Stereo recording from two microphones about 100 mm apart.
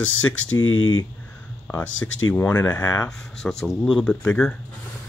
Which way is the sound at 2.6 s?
30° left (ahead or behind).